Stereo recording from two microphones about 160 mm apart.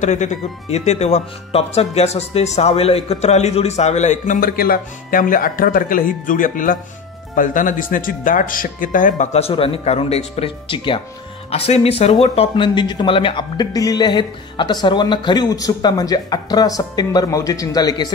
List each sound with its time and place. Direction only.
0.0 s speech: 50° left (ahead or behind)
4.4 s speech: 70° left (ahead or behind); by 18.1 s 25° left (ahead or behind)